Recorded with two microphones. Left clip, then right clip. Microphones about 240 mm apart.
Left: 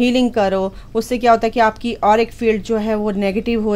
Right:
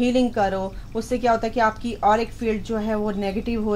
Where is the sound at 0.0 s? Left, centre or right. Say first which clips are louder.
Left 5 dB; left.